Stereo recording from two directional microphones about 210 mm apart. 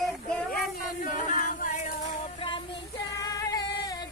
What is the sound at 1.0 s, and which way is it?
Music, 40° left (ahead or behind).